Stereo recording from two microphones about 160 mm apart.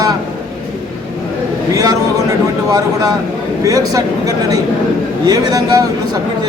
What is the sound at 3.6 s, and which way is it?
Speech, 20° right (ahead or behind).